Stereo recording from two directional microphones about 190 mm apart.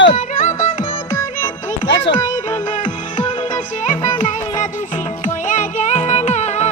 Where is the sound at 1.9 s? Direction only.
65° left (ahead or behind).